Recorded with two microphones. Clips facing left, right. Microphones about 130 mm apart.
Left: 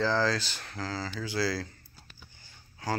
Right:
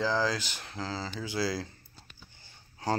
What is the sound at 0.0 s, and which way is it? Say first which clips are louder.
Speech: left 2 dB; 15° right (ahead or behind).